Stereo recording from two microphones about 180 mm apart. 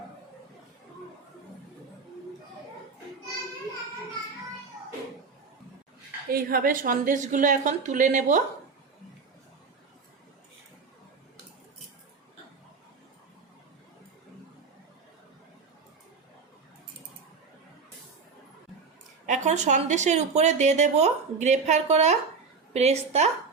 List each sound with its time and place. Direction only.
6.3 s a woman's voice: 55° right (ahead or behind)
19.2 s speech: 40° right (ahead or behind)